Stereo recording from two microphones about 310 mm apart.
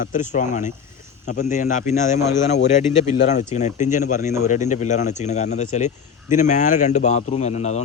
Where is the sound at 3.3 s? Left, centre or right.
Left.